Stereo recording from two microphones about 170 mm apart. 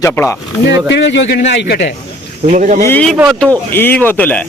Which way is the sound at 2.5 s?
50° right (ahead or behind).